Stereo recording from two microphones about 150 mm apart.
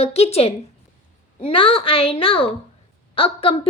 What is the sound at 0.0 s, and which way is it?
A woman's voice, 45° left (ahead or behind).